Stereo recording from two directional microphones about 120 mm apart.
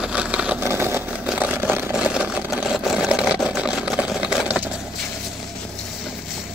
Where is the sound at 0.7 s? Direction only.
20° right (ahead or behind).